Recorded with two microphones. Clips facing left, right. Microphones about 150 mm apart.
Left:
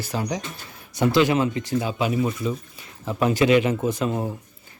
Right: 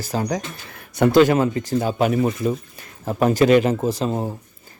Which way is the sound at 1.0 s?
50° right (ahead or behind).